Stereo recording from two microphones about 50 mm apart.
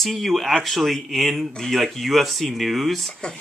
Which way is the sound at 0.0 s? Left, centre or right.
Centre.